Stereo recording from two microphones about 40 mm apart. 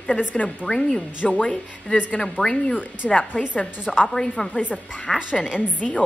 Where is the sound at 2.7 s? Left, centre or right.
Left.